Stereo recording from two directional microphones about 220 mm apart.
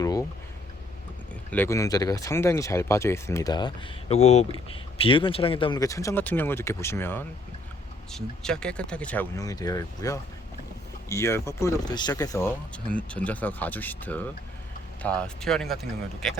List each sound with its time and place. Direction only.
0.0 s a sound: 15° left (ahead or behind)
1.5 s speech: 10° left (ahead or behind)
4.1 s speech: 30° left (ahead or behind); by 16.3 s centre (ahead or behind)